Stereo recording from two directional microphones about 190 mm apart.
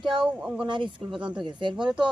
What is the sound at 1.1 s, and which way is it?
Speech, 5° right (ahead or behind).